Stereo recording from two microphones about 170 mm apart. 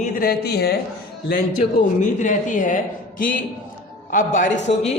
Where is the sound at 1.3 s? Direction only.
50° left (ahead or behind).